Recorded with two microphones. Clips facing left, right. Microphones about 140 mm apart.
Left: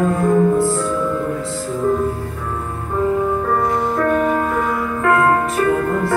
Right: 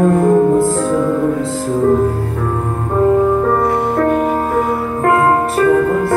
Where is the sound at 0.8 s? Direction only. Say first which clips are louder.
Right 6 dB; 55° right (ahead or behind); by 5.7 s 30° right (ahead or behind).